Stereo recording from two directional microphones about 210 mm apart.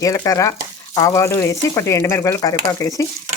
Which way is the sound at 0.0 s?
15° left (ahead or behind).